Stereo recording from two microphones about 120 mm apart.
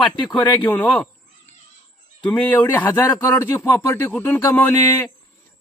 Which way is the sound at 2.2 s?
10° left (ahead or behind).